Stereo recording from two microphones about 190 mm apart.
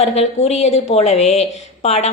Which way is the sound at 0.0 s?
35° left (ahead or behind).